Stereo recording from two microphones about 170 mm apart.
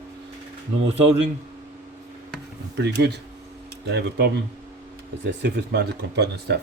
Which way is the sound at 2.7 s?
80° right.